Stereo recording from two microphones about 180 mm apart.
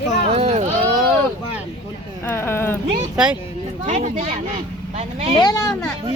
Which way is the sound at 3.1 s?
5° right (ahead or behind).